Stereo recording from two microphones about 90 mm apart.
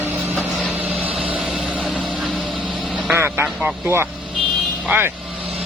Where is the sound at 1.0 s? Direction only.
15° right (ahead or behind).